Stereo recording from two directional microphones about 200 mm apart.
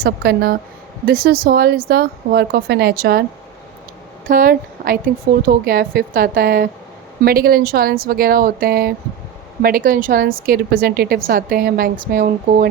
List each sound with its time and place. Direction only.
0.0 s a woman's voice: 50° right (ahead or behind)
4.3 s a woman's voice: 45° right (ahead or behind)